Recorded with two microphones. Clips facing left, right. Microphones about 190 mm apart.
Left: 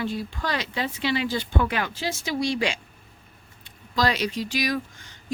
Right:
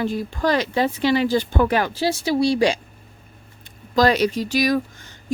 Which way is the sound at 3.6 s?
45° right (ahead or behind).